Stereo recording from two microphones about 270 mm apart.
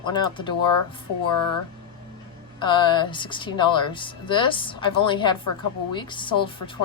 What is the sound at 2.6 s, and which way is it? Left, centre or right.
A woman's voice, centre.